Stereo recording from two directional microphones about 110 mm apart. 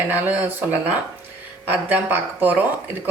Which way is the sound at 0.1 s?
15° right (ahead or behind).